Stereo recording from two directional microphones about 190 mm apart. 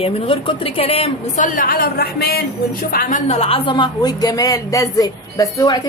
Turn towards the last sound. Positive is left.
turn(degrees=20)  # may be behind; listen again after turning